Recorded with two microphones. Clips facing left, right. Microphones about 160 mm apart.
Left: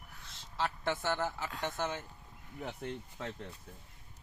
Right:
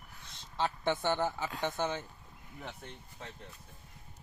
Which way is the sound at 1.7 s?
20° right (ahead or behind).